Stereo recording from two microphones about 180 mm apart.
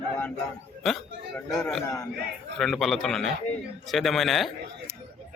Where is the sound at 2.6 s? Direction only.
Centre (ahead or behind).